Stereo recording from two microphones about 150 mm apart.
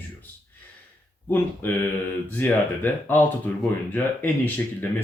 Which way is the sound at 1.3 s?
15° left (ahead or behind).